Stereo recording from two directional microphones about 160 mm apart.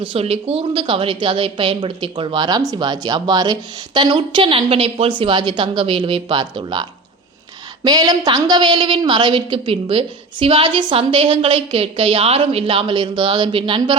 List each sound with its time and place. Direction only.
0.0 s a woman's voice: 35° right (ahead or behind)
7.9 s a woman's voice: 25° right (ahead or behind)